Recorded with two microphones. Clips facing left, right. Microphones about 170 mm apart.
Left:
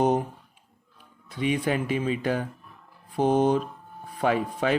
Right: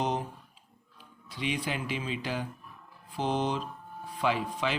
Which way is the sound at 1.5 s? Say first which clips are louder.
Left 8 dB; 50° left (ahead or behind).